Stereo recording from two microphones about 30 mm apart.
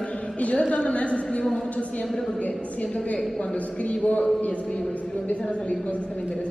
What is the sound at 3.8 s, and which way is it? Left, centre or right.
Speech, left.